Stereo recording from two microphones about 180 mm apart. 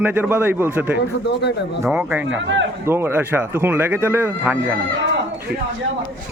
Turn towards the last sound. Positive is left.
turn(degrees=-10)  # may be behind; listen again after turning